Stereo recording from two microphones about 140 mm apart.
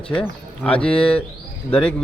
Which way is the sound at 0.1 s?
10° left (ahead or behind).